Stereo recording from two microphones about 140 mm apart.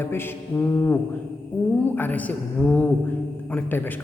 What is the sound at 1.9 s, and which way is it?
A man's voice, 10° left (ahead or behind).